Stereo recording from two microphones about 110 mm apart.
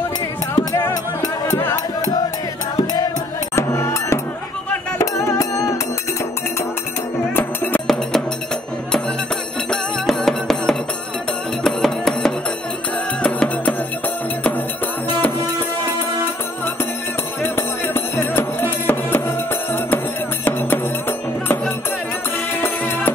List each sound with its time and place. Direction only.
2.7 s music: 35° left (ahead or behind)
3.5 s music: 25° left (ahead or behind)
7.3 s music: 15° left (ahead or behind)
7.8 s music: centre (ahead or behind)
9.7 s music: 5° left (ahead or behind)
17.4 s music: 20° left (ahead or behind)
22.6 s music: 20° left (ahead or behind)